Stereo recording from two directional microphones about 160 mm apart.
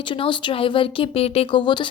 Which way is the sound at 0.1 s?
30° left (ahead or behind).